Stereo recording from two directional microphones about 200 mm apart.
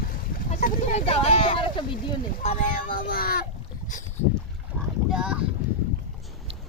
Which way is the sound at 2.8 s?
45° left (ahead or behind).